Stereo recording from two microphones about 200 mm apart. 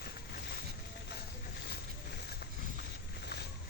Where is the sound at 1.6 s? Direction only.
55° left (ahead or behind).